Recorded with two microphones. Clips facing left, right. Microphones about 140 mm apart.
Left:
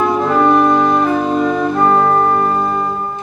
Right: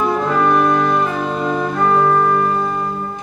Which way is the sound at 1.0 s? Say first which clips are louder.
Left 5 dB; 40° left (ahead or behind).